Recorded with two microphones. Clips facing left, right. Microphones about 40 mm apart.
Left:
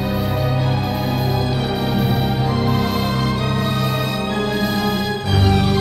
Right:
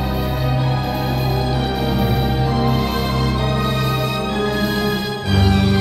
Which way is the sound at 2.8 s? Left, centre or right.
Centre.